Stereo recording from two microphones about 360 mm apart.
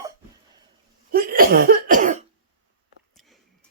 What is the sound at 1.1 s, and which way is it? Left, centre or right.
Speech, right.